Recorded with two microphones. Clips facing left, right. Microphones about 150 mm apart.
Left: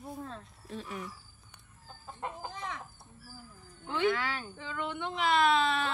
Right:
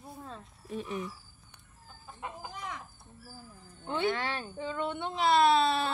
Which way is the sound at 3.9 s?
30° right (ahead or behind).